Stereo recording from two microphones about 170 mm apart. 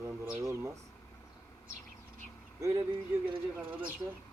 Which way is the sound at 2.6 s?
20° right (ahead or behind).